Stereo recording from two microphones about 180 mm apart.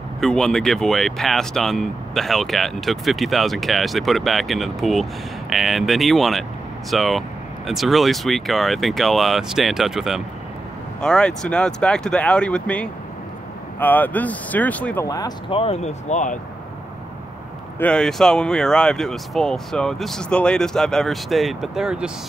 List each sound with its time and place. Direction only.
0.2 s speech: 5° left (ahead or behind)
15.0 s speech: 20° left (ahead or behind)
15.5 s speech: 35° left (ahead or behind)
17.7 s speech: 5° left (ahead or behind)